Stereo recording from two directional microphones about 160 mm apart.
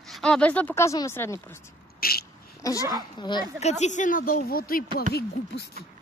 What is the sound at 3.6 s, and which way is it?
A woman's voice, 45° left (ahead or behind).